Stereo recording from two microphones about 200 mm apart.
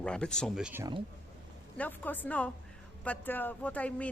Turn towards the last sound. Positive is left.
turn(degrees=5)  # may be behind; listen again after turning